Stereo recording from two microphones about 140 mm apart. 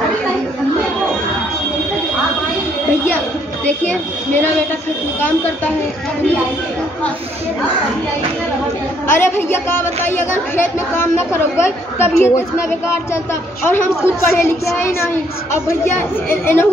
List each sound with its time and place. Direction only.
3.6 s speech: 10° left (ahead or behind)
9.0 s speech: 15° left (ahead or behind)